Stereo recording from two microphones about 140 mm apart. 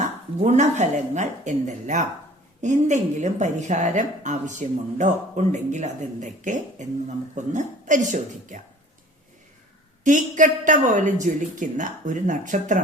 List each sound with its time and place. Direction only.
0.0 s a woman's voice: 55° right (ahead or behind)
10.0 s a woman's voice: 65° right (ahead or behind)